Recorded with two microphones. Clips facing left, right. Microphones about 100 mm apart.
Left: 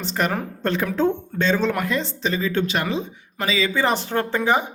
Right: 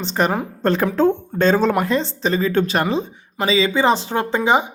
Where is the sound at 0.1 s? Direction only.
30° right (ahead or behind).